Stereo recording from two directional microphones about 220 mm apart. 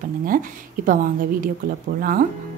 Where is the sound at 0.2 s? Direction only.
40° right (ahead or behind).